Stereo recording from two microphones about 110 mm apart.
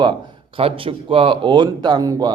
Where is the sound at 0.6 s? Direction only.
55° right (ahead or behind); by 2.3 s 35° right (ahead or behind).